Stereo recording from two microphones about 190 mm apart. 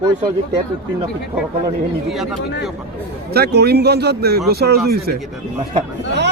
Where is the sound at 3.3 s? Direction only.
55° right (ahead or behind).